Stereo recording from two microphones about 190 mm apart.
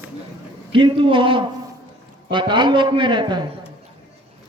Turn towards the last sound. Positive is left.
turn(degrees=-25)  # may be behind; listen again after turning